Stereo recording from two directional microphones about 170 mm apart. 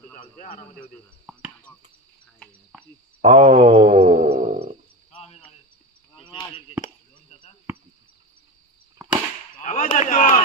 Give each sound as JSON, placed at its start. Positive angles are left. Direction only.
{"t": 2.3, "sound": "frog", "side_deg": 5}
{"t": 3.2, "sound": "mantra", "side_deg": -35}
{"t": 4.4, "sound": "wild animals", "side_deg": -45}
{"t": 5.1, "sound": "cricket", "side_deg": 35}
{"t": 6.1, "sound": "chop", "side_deg": 30}
{"t": 6.8, "sound": "a sound", "side_deg": 45}
{"t": 9.6, "sound": "a sound", "side_deg": 45}
{"t": 9.9, "sound": "a man's voice", "side_deg": 50}